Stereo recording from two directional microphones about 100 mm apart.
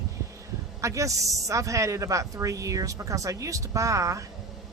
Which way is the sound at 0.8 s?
35° right (ahead or behind).